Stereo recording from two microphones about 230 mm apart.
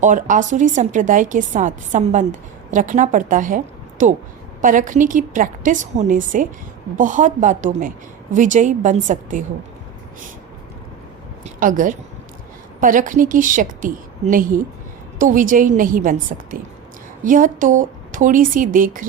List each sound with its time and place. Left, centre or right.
0.0 s a woman's voice: right
11.4 s a woman's voice: right